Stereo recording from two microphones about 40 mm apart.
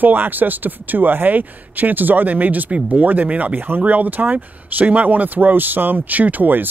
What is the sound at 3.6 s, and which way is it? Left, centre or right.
Speech, right.